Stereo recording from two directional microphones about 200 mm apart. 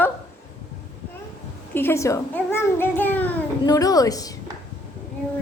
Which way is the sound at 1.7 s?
10° left (ahead or behind).